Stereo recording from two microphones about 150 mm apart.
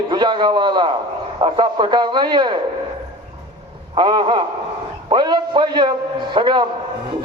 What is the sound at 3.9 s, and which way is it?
A man's voice, 30° right (ahead or behind).